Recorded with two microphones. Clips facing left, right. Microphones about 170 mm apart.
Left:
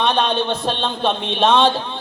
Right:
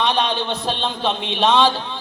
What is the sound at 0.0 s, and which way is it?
A man's voice, 55° left (ahead or behind).